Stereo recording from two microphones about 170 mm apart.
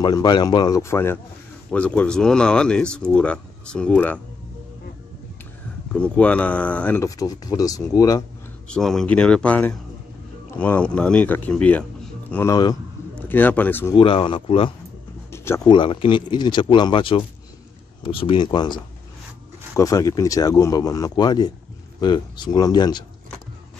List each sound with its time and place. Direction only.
0.0 s speech: 25° left (ahead or behind); by 4.2 s 5° left (ahead or behind)
5.9 s speech: 5° left (ahead or behind)
8.6 s speech: 5° left (ahead or behind)
13.9 s speech: 30° left (ahead or behind)
15.3 s a sound: 15° left (ahead or behind)
15.7 s speech: 30° left (ahead or behind)